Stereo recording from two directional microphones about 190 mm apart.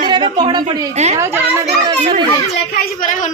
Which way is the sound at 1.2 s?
15° right (ahead or behind).